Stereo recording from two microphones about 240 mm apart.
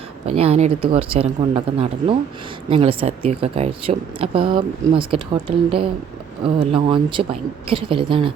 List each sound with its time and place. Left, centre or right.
0.3 s speech: right